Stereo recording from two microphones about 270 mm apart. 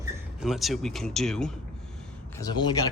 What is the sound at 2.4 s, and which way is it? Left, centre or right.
Speech, centre.